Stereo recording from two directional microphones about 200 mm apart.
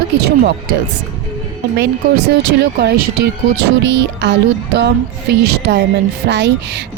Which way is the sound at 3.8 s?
60° right (ahead or behind).